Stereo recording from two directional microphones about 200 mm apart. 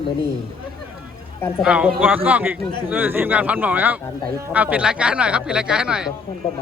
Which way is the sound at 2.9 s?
10° right (ahead or behind).